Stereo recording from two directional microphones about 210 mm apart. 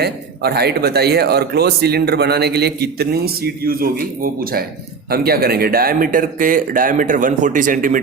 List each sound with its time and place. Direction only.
0.0 s a man's voice: 50° right (ahead or behind)